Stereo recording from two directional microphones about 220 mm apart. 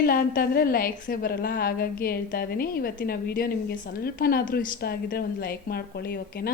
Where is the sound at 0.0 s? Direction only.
40° left (ahead or behind).